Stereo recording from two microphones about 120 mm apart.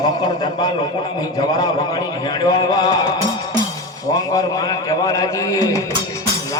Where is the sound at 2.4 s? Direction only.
35° left (ahead or behind).